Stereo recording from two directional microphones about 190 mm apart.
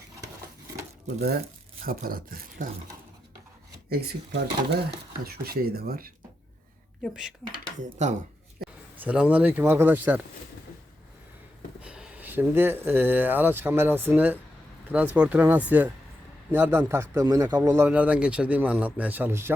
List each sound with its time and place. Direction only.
1.9 s speech: 50° right (ahead or behind)
3.8 s speech: 60° right (ahead or behind)
8.0 s speech: 40° right (ahead or behind)
9.0 s a man's voice: 5° right (ahead or behind)
11.8 s a man's voice: 5° right (ahead or behind)